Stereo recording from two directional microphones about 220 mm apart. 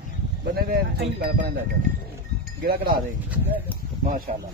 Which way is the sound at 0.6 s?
45° right (ahead or behind).